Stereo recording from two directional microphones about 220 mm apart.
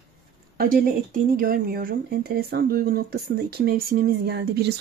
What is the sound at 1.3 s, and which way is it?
Speech, 40° right (ahead or behind).